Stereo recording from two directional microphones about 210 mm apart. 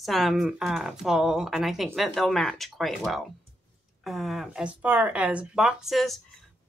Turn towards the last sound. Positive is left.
turn(degrees=0)  # may be behind; listen again after turning